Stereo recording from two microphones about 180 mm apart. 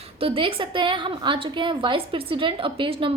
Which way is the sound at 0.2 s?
30° right (ahead or behind).